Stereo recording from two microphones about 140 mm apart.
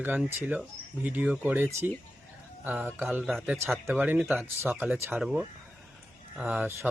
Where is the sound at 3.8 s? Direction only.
15° right (ahead or behind).